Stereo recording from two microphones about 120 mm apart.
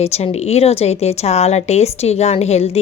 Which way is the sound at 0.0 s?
60° left (ahead or behind).